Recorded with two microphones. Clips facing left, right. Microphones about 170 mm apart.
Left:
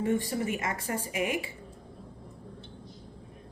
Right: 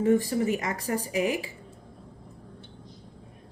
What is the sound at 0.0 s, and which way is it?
Speech, 35° right (ahead or behind).